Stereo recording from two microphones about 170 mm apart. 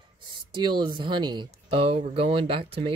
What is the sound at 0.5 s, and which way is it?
Speech, 25° right (ahead or behind).